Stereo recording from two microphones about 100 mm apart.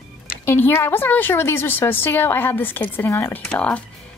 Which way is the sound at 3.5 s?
10° left (ahead or behind).